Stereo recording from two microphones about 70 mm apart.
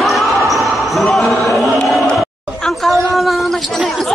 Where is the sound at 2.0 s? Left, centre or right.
Centre.